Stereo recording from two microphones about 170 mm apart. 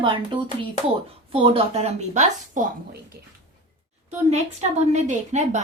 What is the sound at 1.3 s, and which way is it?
A woman's voice, 35° right (ahead or behind).